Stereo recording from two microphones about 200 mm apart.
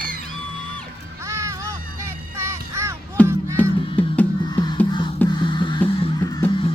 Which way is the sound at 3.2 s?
5° left (ahead or behind).